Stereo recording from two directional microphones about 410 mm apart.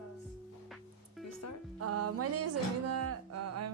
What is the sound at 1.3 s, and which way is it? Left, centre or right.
Music, left.